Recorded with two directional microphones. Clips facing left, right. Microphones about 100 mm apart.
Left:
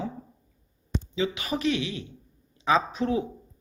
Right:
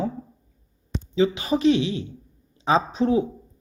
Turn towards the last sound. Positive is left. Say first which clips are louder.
# right 5 dB
turn(degrees=-25)  # may be behind; listen again after turning